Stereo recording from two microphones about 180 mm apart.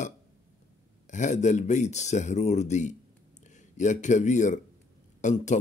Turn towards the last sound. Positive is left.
turn(degrees=40)  # may be behind; listen again after turning